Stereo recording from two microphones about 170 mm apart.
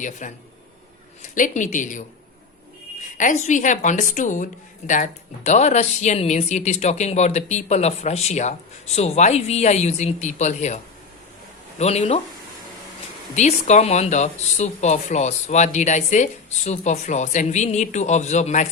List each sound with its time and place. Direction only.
0.0 s speech: 45° left (ahead or behind)
3.2 s speech: 45° left (ahead or behind)
11.8 s speech: 40° left (ahead or behind)
13.3 s speech: 45° left (ahead or behind)